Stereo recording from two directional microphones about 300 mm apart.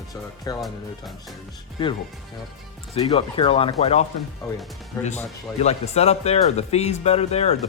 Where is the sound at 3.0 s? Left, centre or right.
Centre.